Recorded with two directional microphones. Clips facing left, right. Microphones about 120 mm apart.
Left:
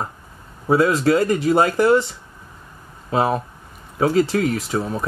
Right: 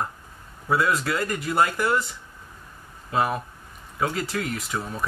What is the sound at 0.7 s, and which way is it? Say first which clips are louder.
Speech: left 7 dB; 40° left (ahead or behind).